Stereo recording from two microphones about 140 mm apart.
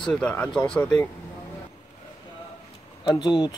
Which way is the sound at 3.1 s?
30° left (ahead or behind).